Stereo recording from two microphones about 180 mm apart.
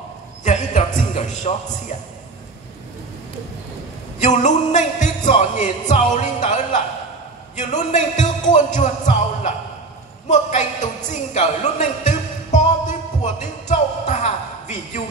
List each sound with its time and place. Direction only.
0.4 s a sound: 40° left (ahead or behind)
4.2 s music: 40° left (ahead or behind)
7.5 s a woman's voice: 40° left (ahead or behind)
11.1 s music: 40° left (ahead or behind)